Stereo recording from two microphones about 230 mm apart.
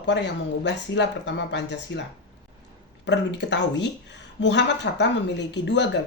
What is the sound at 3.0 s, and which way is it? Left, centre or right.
Speech, left.